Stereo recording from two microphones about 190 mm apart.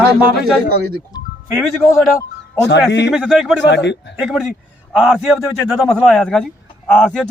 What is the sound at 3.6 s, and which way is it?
Speech, 65° left (ahead or behind).